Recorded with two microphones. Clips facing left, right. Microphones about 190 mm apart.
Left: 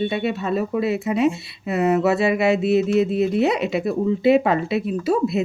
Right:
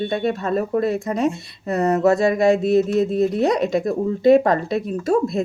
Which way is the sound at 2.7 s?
45° right (ahead or behind).